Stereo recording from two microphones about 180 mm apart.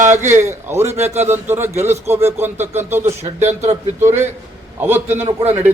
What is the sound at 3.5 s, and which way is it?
Speech, 40° right (ahead or behind).